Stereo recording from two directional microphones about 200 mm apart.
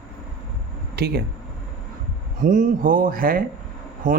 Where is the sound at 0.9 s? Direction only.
55° right (ahead or behind).